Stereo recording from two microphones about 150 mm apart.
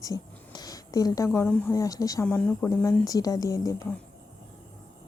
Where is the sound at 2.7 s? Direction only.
20° left (ahead or behind).